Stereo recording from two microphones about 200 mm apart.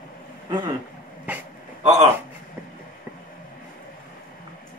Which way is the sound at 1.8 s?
35° right (ahead or behind).